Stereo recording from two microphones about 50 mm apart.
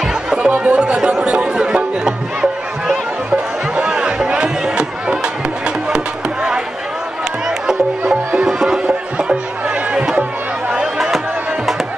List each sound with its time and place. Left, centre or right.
0.0 s chatter: centre
3.3 s music: right
8.5 s music: centre
9.9 s chatter: centre